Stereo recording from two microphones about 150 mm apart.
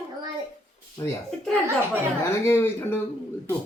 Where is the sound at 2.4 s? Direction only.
15° left (ahead or behind).